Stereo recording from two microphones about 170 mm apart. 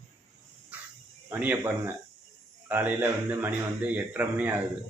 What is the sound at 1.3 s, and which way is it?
Speech, 10° right (ahead or behind).